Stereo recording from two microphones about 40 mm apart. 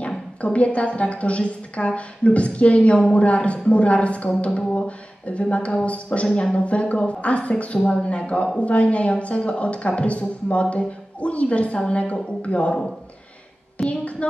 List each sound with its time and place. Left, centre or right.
0.4 s speech: left
13.8 s a woman's voice: centre